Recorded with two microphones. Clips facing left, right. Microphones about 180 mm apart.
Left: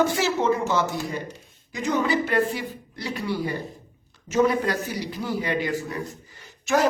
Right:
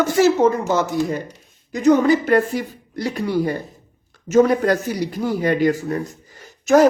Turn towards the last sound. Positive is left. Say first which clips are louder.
# right 9 dB
turn(degrees=-40)  # may be behind; listen again after turning